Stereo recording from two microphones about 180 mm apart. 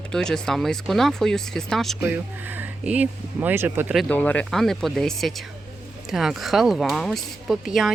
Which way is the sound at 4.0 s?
10° left (ahead or behind).